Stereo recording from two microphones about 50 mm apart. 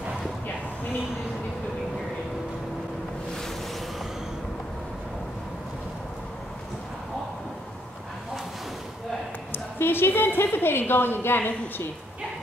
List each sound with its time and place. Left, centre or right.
9.5 s a woman's voice: left